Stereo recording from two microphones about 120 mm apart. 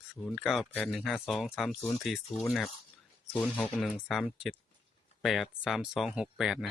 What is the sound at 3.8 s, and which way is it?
Speech, centre (ahead or behind).